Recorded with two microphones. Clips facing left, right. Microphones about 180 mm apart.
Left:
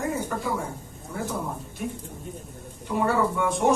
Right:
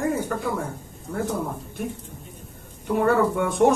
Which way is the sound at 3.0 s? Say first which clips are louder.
Right 3 dB; 55° right (ahead or behind).